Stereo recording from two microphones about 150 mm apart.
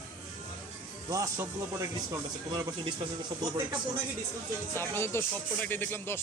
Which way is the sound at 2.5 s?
30° right (ahead or behind).